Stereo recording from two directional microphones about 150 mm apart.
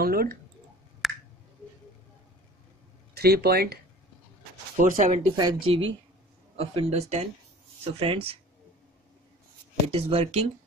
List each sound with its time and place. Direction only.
0.0 s speech: 90° right
1.0 s finger snapping: centre (ahead or behind)
3.2 s speech: 90° right
4.7 s speech: 60° right (ahead or behind)
5.3 s speech: 30° right (ahead or behind)
9.9 s speech: 40° right (ahead or behind)